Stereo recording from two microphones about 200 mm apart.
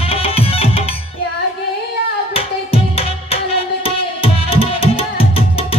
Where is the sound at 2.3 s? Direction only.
30° left (ahead or behind).